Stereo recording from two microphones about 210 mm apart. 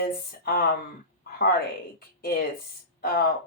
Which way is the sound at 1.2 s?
45° left (ahead or behind).